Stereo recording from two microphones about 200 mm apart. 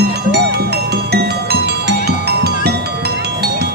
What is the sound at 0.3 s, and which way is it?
Music, 55° right (ahead or behind).